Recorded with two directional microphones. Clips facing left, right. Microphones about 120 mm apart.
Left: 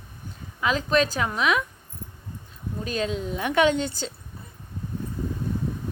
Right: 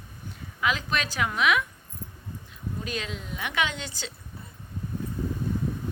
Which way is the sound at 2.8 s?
35° left (ahead or behind).